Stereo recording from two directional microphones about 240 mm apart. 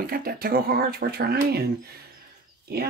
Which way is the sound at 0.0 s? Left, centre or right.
Right.